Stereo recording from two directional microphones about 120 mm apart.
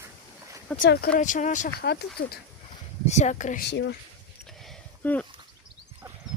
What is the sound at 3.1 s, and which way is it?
Speech, 80° left.